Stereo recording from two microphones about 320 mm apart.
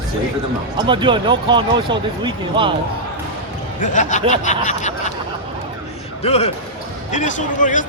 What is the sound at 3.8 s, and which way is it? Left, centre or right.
Speech, left.